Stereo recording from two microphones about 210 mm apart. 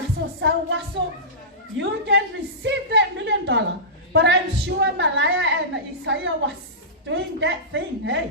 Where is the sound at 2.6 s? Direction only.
55° right (ahead or behind).